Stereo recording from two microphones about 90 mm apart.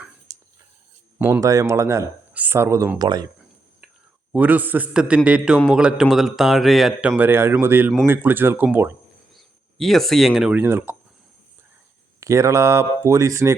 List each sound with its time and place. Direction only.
0.3 s a sound: 40° right (ahead or behind)
1.2 s speech: 25° right (ahead or behind)
2.3 s a sound: 20° right (ahead or behind)
2.6 s speech: 30° right (ahead or behind)
3.0 s speech: 45° right (ahead or behind)
4.3 s a man's voice: 15° right (ahead or behind); by 6.9 s centre (ahead or behind)
7.2 s speech: 25° right (ahead or behind)
9.3 s a sound: centre (ahead or behind)
10.5 s speech: 25° right (ahead or behind)
12.2 s speech: 35° right (ahead or behind)